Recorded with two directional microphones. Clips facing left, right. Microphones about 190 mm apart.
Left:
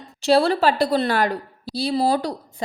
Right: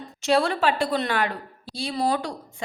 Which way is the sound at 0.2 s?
35° left (ahead or behind).